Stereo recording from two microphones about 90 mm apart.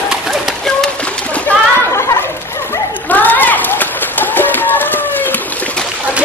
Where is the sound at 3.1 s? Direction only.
20° left (ahead or behind).